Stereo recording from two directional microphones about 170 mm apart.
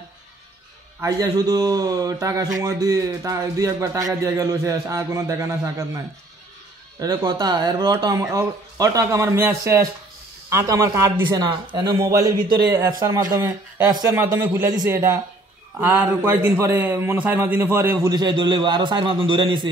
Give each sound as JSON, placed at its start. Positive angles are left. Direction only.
{"t": 1.0, "sound": "a man's voice", "side_deg": -20}
{"t": 7.0, "sound": "a man's voice", "side_deg": -20}